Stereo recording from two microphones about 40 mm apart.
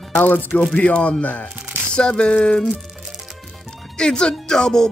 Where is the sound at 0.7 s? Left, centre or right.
Left.